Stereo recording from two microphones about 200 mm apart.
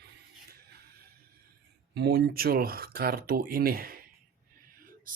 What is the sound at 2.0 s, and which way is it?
Speech, 55° right (ahead or behind).